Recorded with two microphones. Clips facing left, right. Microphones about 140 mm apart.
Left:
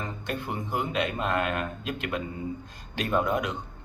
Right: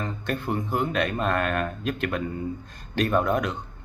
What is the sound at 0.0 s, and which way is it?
Speech, 15° left (ahead or behind).